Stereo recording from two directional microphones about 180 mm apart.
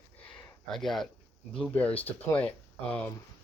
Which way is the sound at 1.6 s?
5° left (ahead or behind).